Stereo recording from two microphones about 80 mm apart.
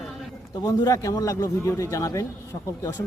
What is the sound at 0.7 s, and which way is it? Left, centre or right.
Speech, left.